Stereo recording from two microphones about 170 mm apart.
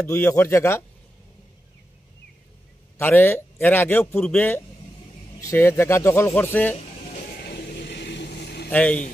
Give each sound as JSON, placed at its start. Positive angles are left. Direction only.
{"t": 0.0, "sound": "a man's voice", "side_deg": 15}
{"t": 3.0, "sound": "a man's voice", "side_deg": 10}
{"t": 7.1, "sound": "vehicle", "side_deg": 50}
{"t": 8.6, "sound": "speech", "side_deg": 10}